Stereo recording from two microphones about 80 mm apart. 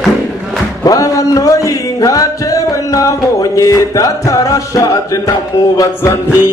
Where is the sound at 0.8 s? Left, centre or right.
Left.